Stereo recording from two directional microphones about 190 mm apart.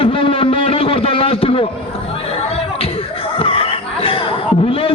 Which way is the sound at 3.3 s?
30° left (ahead or behind).